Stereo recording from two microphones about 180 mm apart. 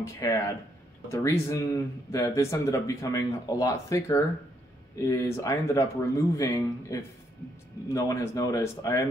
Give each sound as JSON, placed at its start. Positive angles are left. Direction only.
{"t": 0.0, "sound": "speech", "side_deg": 20}